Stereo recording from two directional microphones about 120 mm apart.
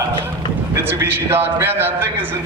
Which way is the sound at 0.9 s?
20° right (ahead or behind).